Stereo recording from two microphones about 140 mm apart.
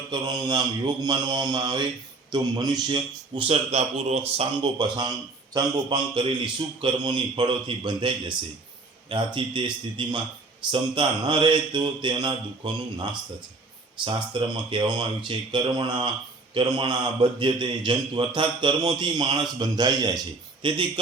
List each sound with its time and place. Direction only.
0.1 s a man's voice: 30° right (ahead or behind)